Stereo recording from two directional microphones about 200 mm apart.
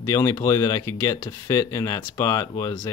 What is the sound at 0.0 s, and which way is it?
Speech, 15° left (ahead or behind).